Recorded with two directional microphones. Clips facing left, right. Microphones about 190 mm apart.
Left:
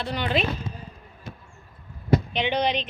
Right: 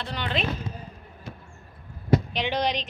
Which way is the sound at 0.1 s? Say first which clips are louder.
Left 5 dB; 10° left (ahead or behind).